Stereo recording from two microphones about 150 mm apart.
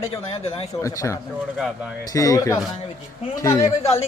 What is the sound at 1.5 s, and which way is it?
Speech, 5° right (ahead or behind).